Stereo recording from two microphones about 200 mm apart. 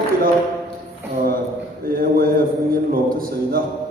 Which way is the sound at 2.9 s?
45° right (ahead or behind).